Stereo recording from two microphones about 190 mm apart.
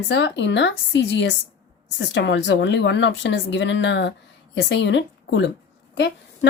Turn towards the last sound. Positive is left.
turn(degrees=70)  # may be behind; listen again after turning